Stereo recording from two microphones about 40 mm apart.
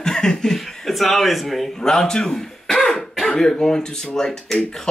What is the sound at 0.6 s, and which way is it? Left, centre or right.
A man's voice, centre.